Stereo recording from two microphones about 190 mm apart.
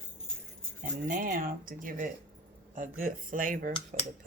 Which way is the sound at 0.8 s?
45° right (ahead or behind).